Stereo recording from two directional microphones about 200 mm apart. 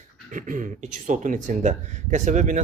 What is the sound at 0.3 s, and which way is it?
Speech, 40° right (ahead or behind).